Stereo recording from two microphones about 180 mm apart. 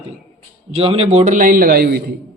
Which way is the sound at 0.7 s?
30° right (ahead or behind).